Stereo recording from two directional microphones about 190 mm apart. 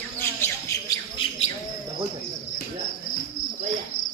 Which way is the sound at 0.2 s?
10° left (ahead or behind).